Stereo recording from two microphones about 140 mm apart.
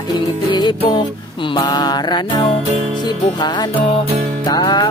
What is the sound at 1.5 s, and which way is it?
Mantra, 30° left (ahead or behind).